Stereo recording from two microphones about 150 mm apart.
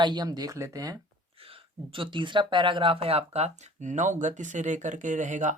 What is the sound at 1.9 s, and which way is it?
Speech, 35° right (ahead or behind).